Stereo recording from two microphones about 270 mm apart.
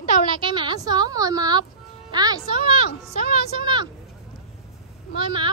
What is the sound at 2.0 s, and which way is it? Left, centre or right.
Speech, centre.